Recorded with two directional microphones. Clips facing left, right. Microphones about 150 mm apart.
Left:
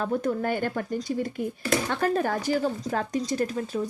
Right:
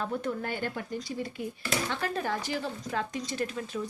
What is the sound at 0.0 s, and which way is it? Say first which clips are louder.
Speech: left 6 dB; 45° left (ahead or behind).